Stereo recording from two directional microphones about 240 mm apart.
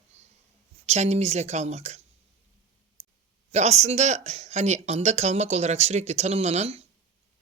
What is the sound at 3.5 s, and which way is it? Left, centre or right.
Speech, right.